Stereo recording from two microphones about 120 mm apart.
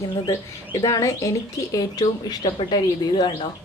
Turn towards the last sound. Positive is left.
turn(degrees=35)  # may be behind; listen again after turning